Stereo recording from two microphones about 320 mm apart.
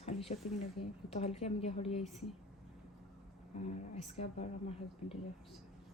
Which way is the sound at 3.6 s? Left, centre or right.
Centre.